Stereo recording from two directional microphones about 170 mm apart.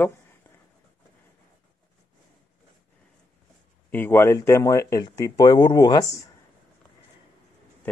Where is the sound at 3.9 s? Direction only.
15° left (ahead or behind).